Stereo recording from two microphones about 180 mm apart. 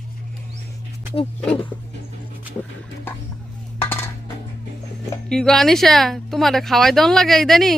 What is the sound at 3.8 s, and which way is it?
Dishes, 10° left (ahead or behind).